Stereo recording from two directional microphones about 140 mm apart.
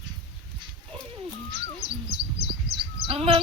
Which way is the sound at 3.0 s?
40° right (ahead or behind).